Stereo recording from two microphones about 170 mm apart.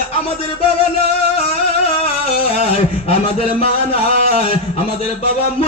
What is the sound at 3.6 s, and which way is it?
A man's voice, 35° left (ahead or behind).